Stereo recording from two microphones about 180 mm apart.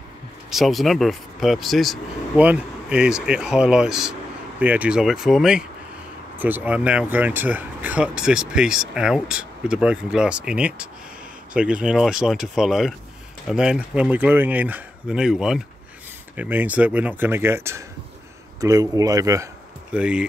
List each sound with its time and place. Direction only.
0.5 s speech: centre (ahead or behind); by 19.5 s 20° right (ahead or behind)
19.9 s speech: 5° right (ahead or behind)